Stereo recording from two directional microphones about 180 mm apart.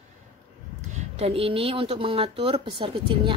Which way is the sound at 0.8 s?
40° right (ahead or behind).